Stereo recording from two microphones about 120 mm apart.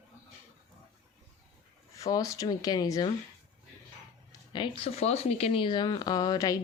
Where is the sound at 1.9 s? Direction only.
30° left (ahead or behind).